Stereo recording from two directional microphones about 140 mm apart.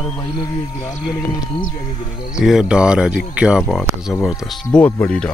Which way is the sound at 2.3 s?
5° right (ahead or behind).